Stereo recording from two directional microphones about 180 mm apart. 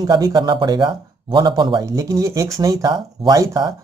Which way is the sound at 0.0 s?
20° right (ahead or behind).